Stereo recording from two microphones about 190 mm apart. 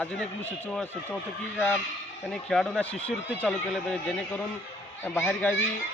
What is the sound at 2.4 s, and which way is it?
Speech, centre (ahead or behind).